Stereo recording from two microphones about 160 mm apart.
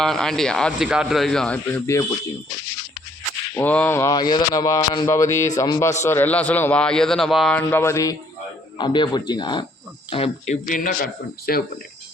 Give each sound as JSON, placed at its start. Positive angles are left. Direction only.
{"t": 0.0, "sound": "a man's voice", "side_deg": 5}
{"t": 3.5, "sound": "a man's voice", "side_deg": 10}
{"t": 8.8, "sound": "speech", "side_deg": 30}